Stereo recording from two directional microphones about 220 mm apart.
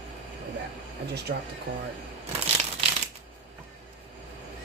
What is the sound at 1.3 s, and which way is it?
Speech, 50° right (ahead or behind).